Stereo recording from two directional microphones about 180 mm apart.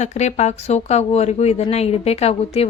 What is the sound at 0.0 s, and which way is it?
Speech, 40° left (ahead or behind).